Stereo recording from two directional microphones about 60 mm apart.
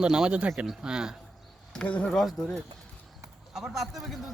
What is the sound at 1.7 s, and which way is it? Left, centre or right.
Speech, centre.